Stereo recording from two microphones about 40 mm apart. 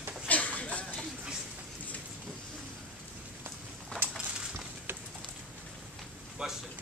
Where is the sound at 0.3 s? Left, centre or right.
Left.